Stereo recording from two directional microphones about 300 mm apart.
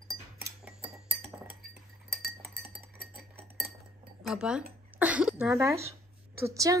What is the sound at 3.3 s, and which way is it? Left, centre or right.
Cutlery, centre.